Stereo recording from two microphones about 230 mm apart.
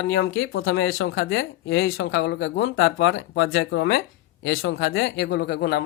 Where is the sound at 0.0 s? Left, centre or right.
Left.